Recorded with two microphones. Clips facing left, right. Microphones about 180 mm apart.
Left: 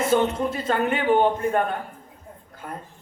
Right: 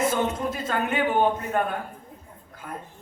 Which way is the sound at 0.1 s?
30° left (ahead or behind).